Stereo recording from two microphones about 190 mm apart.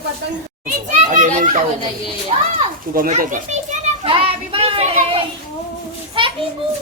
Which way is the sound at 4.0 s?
30° right (ahead or behind).